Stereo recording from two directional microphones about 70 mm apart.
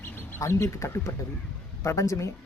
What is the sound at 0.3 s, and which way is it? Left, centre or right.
Speech, left.